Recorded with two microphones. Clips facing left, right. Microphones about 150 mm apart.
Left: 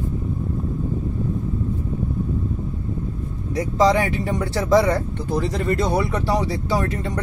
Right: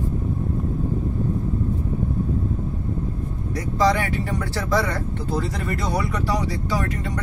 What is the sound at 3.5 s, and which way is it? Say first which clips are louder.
Speech: left 3 dB; 25° left (ahead or behind).